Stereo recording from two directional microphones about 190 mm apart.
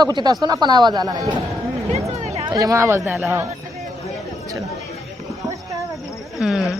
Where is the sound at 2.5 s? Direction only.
20° right (ahead or behind).